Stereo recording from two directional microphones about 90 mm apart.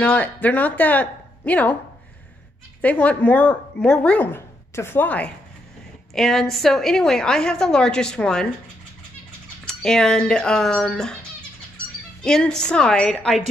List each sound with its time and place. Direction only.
0.0 s a woman's voice: 15° left (ahead or behind)
2.8 s a woman's voice: 15° left (ahead or behind)
6.1 s a woman's voice: 5° left (ahead or behind)
9.7 s a woman's voice: 5° left (ahead or behind)
12.2 s a woman's voice: 5° left (ahead or behind)